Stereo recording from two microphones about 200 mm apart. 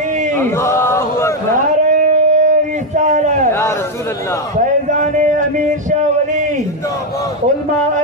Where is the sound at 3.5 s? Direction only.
15° left (ahead or behind).